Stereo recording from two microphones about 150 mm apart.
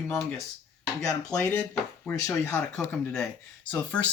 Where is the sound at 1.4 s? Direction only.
15° left (ahead or behind).